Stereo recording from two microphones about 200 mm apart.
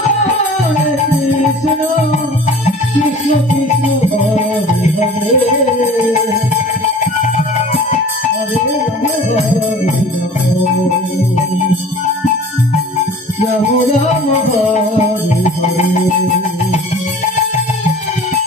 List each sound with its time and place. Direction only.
0.7 s music: 40° left (ahead or behind)
2.6 s music: 35° left (ahead or behind)
7.2 s music: 35° left (ahead or behind)
13.7 s music: 35° left (ahead or behind)
15.4 s music: 35° left (ahead or behind)